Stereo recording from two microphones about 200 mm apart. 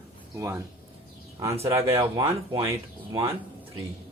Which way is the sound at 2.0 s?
25° right (ahead or behind).